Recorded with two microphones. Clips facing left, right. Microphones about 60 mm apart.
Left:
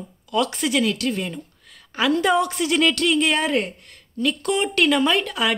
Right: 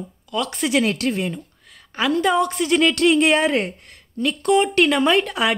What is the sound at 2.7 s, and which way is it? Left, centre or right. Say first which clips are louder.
Speech: right 4 dB; centre.